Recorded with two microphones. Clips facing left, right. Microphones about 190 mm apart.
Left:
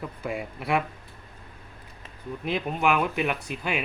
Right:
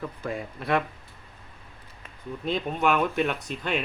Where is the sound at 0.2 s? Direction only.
10° left (ahead or behind).